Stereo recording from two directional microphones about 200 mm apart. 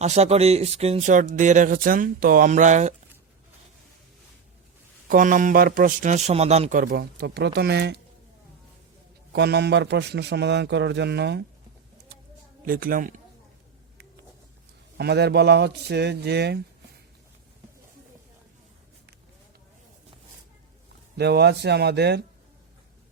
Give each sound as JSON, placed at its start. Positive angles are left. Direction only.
{"t": 0.0, "sound": "speech", "side_deg": -35}
{"t": 5.0, "sound": "a man's voice", "side_deg": -40}
{"t": 9.3, "sound": "a man's voice", "side_deg": -55}
{"t": 12.6, "sound": "speech", "side_deg": -45}
{"t": 14.9, "sound": "a man's voice", "side_deg": -55}
{"t": 21.2, "sound": "a man's voice", "side_deg": -55}